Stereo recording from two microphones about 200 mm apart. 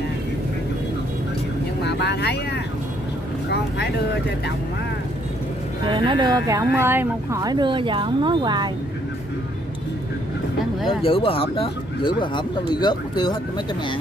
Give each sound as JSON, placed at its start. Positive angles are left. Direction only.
{"t": 1.8, "sound": "vehicle", "side_deg": 60}
{"t": 3.5, "sound": "speech", "side_deg": 55}
{"t": 5.9, "sound": "speech", "side_deg": -20}
{"t": 11.0, "sound": "speech", "side_deg": 25}